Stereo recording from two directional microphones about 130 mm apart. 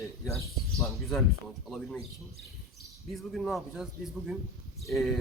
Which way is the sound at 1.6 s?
Centre (ahead or behind).